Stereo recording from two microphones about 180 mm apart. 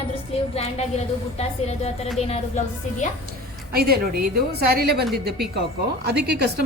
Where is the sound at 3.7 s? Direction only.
60° right (ahead or behind).